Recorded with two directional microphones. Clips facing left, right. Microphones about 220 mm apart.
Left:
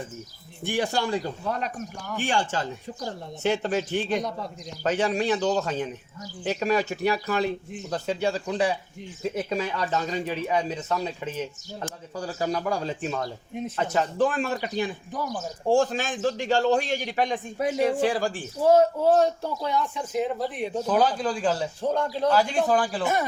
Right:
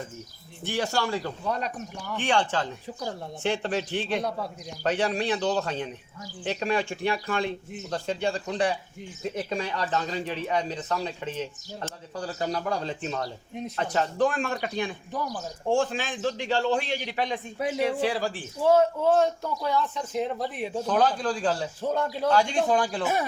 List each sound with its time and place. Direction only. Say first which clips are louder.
0.6 s speech: left 2 dB; 15° left (ahead or behind)
3.4 s speech: left 3 dB; 5° left (ahead or behind)
15.7 s a man's voice: left 3 dB; 40° left (ahead or behind)
19.6 s speech: even; 15° left (ahead or behind); by 22.3 s 5° right (ahead or behind)
22.3 s speech: even; 5° left (ahead or behind)